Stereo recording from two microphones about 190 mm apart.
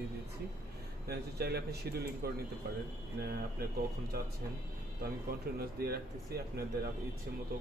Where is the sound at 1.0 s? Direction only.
55° right (ahead or behind).